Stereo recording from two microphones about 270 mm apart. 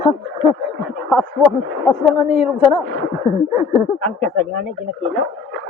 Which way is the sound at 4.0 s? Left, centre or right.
Centre.